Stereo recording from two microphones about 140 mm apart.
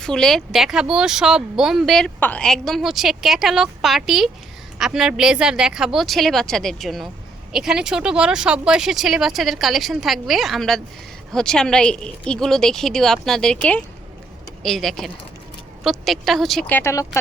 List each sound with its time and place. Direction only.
0.0 s speech: 5° left (ahead or behind)
16.6 s speech: 15° left (ahead or behind)